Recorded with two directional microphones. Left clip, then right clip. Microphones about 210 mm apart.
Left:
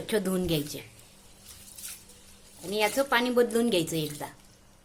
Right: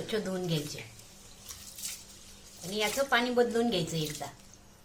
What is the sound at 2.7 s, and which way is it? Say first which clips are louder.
A woman's voice: left 3 dB; 45° left (ahead or behind).